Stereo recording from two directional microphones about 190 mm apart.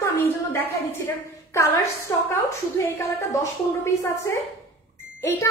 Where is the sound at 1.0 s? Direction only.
15° left (ahead or behind).